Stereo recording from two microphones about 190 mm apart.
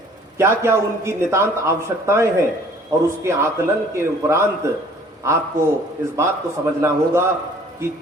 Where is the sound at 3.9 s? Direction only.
15° right (ahead or behind).